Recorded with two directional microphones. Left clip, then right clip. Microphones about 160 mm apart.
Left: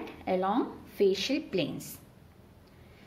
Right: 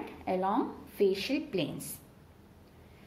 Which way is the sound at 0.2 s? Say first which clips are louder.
Left 2 dB; 15° left (ahead or behind).